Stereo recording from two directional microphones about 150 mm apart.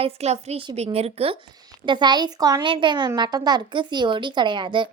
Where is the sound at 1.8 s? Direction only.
30° right (ahead or behind).